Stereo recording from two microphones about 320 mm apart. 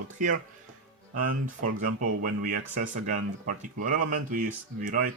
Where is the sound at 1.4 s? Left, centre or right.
Right.